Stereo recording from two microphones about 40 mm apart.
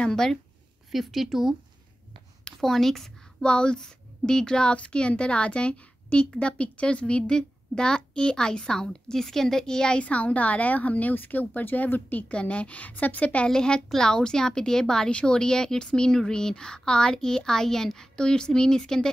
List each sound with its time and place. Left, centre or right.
0.0 s a woman's voice: centre
0.9 s speech: centre
2.6 s a woman's voice: centre
3.4 s a woman's voice: left
12.3 s a woman's voice: left
13.5 s a woman's voice: centre